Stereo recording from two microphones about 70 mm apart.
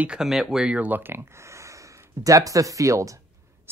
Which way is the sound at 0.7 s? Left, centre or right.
Right.